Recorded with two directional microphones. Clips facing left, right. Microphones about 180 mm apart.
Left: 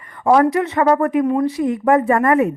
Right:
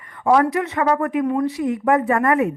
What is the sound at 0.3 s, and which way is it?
A woman's voice, 35° left (ahead or behind).